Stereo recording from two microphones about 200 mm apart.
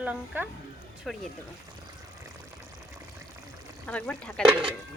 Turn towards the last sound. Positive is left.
turn(degrees=-25)  # may be behind; listen again after turning